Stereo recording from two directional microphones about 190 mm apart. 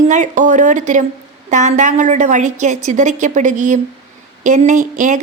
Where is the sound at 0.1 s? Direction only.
40° right (ahead or behind).